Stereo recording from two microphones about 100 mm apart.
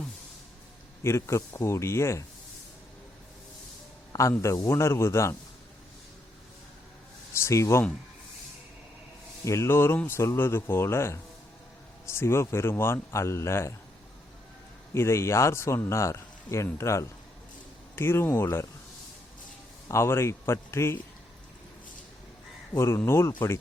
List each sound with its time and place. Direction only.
1.0 s a man's voice: 25° left (ahead or behind)
4.1 s a man's voice: 30° left (ahead or behind)
7.3 s a man's voice: 30° left (ahead or behind)
9.4 s a man's voice: 30° left (ahead or behind)
14.9 s a man's voice: 25° left (ahead or behind)
19.9 s a man's voice: 25° left (ahead or behind)
22.7 s a man's voice: 25° left (ahead or behind)